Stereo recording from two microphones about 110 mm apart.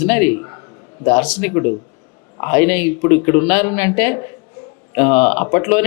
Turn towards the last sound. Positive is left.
turn(degrees=20)  # may be behind; listen again after turning